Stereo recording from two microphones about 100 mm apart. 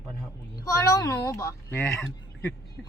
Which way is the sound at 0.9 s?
35° left (ahead or behind).